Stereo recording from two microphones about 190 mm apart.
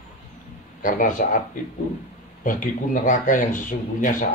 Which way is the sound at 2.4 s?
45° left (ahead or behind).